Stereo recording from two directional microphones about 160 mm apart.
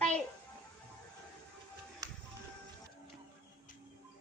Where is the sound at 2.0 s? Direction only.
20° right (ahead or behind).